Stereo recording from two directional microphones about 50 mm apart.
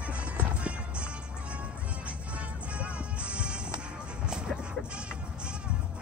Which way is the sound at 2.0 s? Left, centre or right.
Right.